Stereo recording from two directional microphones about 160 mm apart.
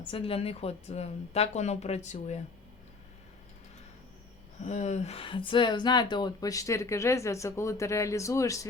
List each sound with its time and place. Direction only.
0.0 s a woman's voice: 35° left (ahead or behind)
4.6 s speech: 45° left (ahead or behind); by 8.6 s 20° left (ahead or behind)